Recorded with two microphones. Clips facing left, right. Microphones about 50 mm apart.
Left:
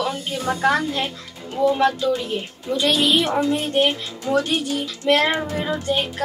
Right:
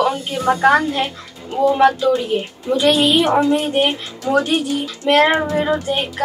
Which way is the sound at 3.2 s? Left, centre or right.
Right.